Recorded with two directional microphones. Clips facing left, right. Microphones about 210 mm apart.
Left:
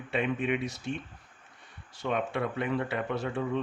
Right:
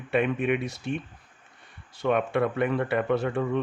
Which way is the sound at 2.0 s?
55° right (ahead or behind).